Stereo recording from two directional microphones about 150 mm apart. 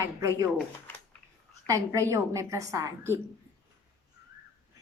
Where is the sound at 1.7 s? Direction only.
20° right (ahead or behind).